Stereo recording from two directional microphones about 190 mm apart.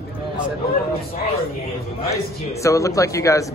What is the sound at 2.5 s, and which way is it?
Speech, 15° left (ahead or behind).